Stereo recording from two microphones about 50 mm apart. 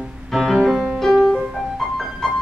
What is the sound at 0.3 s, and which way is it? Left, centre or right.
Music, centre.